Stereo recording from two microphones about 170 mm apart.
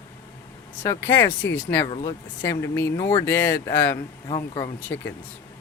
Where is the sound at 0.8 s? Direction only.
15° left (ahead or behind).